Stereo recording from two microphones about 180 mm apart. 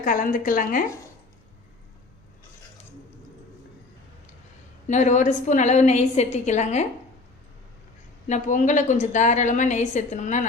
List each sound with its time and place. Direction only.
0.0 s a woman's voice: 50° left (ahead or behind)
4.9 s a woman's voice: 40° left (ahead or behind)
8.3 s a woman's voice: 45° left (ahead or behind)